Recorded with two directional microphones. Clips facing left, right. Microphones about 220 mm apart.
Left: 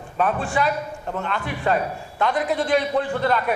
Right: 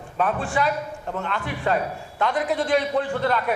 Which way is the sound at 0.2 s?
20° left (ahead or behind).